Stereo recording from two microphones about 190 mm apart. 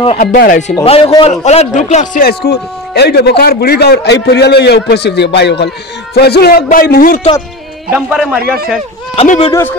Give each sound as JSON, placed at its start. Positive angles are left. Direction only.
{"t": 0.2, "sound": "a man's voice", "side_deg": 50}
{"t": 0.8, "sound": "a man's voice", "side_deg": 30}
{"t": 2.2, "sound": "a man's voice", "side_deg": 55}
{"t": 7.9, "sound": "a man's voice", "side_deg": -5}
{"t": 9.1, "sound": "a man's voice", "side_deg": 30}
{"t": 9.5, "sound": "speech", "side_deg": 10}